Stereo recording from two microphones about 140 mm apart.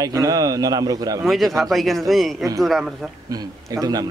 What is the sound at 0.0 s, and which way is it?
Speech, 25° right (ahead or behind).